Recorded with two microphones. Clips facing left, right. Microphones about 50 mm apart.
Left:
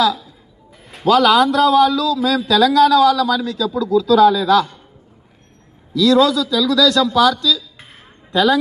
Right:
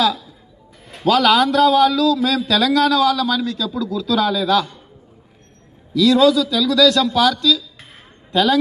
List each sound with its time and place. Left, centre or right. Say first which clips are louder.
0.0 s a man's voice: left 2 dB; centre
6.1 s a man's voice: even; centre